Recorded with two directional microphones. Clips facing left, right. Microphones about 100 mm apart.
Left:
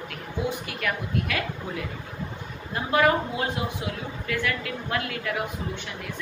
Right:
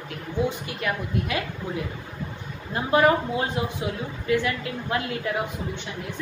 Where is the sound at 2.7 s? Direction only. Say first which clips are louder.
Right 2 dB; 25° right (ahead or behind).